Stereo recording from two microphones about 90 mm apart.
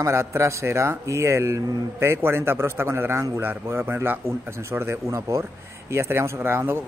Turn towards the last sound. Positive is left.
turn(degrees=-25)  # may be behind; listen again after turning